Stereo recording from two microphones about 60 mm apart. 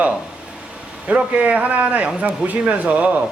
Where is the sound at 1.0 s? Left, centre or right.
Right.